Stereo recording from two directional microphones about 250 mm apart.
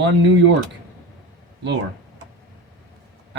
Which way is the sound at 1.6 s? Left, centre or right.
Right.